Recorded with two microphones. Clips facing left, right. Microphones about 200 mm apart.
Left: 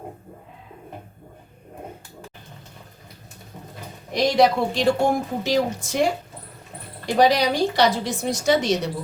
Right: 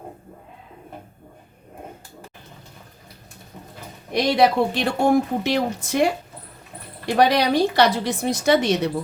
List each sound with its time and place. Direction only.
4.1 s a woman's voice: 60° right (ahead or behind)